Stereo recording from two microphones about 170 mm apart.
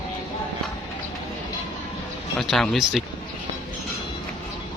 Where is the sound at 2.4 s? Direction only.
Centre (ahead or behind).